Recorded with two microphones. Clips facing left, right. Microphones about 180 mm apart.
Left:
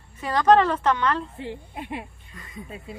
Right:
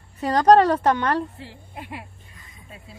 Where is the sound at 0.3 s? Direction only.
40° right (ahead or behind).